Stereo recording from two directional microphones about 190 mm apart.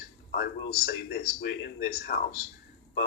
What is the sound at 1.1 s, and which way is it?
Speech, 60° left (ahead or behind).